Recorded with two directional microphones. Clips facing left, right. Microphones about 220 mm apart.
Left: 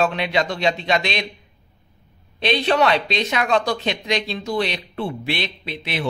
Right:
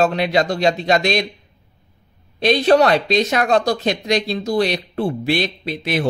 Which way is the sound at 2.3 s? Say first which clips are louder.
Right 5 dB; 45° right (ahead or behind).